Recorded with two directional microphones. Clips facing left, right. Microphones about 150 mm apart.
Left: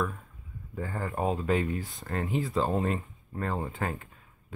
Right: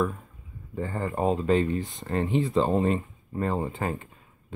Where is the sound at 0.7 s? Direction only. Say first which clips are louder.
Right 4 dB; centre (ahead or behind).